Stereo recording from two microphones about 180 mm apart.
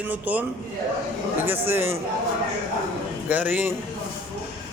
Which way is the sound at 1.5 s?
10° right (ahead or behind).